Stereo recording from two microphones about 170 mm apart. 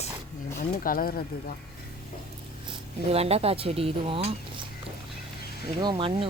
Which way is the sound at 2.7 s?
35° right (ahead or behind).